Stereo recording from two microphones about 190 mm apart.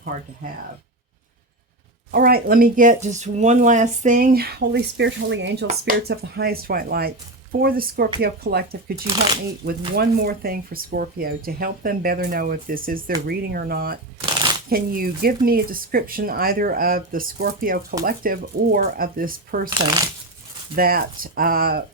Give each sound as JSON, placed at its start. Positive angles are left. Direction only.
{"t": 2.1, "sound": "speech", "side_deg": -50}
{"t": 5.9, "sound": "speech", "side_deg": -60}
{"t": 9.0, "sound": "speech", "side_deg": -25}
{"t": 9.6, "sound": "speech", "side_deg": -55}
{"t": 19.8, "sound": "speech", "side_deg": -20}
{"t": 20.7, "sound": "speech", "side_deg": -50}